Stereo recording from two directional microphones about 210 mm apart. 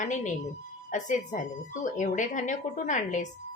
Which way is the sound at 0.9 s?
35° left (ahead or behind).